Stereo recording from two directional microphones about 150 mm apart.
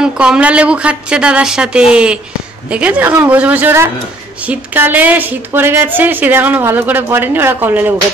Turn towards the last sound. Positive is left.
turn(degrees=-15)  # may be behind; listen again after turning